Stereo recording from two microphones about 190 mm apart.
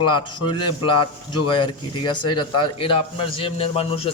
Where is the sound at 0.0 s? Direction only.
25° left (ahead or behind).